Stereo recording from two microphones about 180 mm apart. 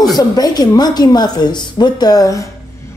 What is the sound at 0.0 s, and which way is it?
A woman's voice, 20° left (ahead or behind).